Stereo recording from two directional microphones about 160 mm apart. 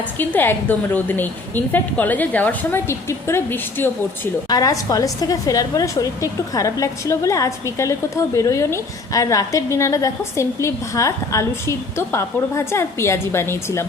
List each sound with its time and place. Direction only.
0.2 s a woman's voice: 10° left (ahead or behind)